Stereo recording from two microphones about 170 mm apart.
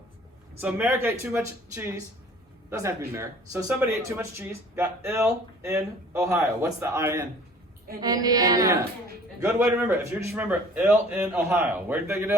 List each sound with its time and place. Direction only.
0.6 s speech: 10° right (ahead or behind)